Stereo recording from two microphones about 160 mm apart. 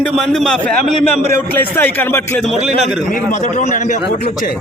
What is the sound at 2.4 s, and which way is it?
Speech, centre (ahead or behind).